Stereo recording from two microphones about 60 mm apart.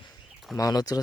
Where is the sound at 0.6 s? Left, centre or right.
Left.